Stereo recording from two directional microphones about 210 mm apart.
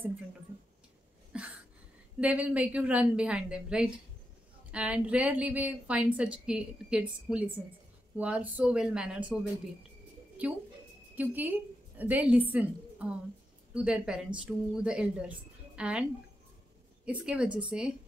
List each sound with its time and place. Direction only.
1.3 s a sound: 5° right (ahead or behind)
2.1 s a woman's voice: 5° right (ahead or behind)
10.4 s a woman's voice: 5° right (ahead or behind)